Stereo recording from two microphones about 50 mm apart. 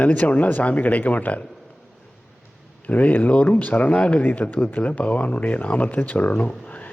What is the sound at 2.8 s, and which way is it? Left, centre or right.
Speech, left.